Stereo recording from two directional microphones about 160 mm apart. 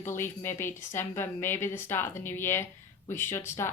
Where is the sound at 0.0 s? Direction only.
15° left (ahead or behind).